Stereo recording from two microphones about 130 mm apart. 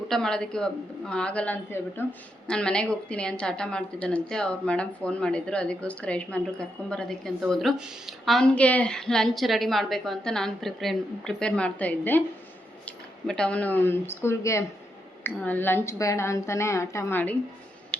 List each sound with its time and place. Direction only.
0.1 s a woman's voice: 5° left (ahead or behind)
13.2 s a woman's voice: 5° left (ahead or behind)